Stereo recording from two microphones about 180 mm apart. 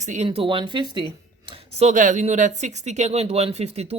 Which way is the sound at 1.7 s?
40° right (ahead or behind).